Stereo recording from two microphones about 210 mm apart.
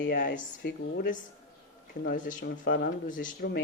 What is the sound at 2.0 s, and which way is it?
Speech, 40° left (ahead or behind).